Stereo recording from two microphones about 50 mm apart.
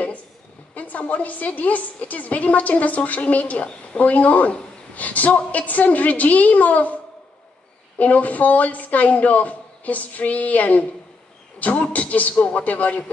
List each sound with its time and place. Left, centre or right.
0.7 s a woman's voice: left
8.0 s a woman's voice: left